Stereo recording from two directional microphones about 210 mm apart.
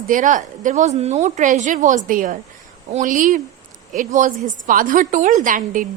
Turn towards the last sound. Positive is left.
turn(degrees=-40)  # may be behind; listen again after turning